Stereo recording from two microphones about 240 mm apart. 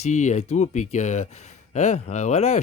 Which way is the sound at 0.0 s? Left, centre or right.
Left.